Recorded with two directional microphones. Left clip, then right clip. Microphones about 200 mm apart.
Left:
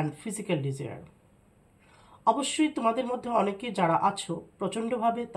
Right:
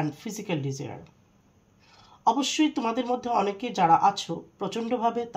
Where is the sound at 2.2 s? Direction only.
30° right (ahead or behind).